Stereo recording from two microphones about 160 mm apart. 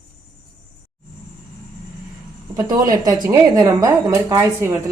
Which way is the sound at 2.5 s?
25° right (ahead or behind).